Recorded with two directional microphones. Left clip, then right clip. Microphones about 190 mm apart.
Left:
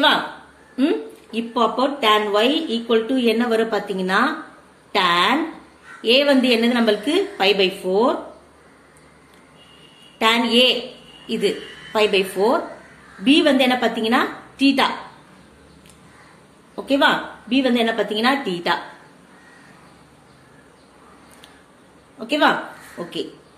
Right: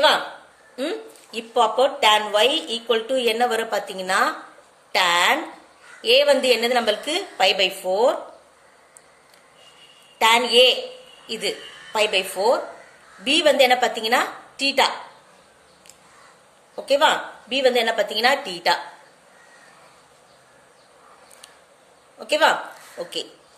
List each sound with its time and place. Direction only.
0.7 s a woman's voice: 35° right (ahead or behind)
10.1 s a woman's voice: 35° right (ahead or behind)
16.8 s a woman's voice: 35° right (ahead or behind)
22.2 s speech: 35° right (ahead or behind)